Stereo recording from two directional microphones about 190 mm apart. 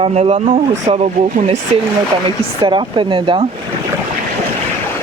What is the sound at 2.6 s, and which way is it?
Speech, 25° right (ahead or behind).